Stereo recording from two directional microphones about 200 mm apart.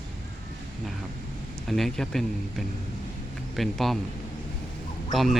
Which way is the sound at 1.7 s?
Centre (ahead or behind).